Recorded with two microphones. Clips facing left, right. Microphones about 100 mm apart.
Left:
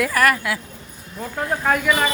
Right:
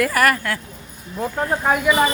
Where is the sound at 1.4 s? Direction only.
15° right (ahead or behind).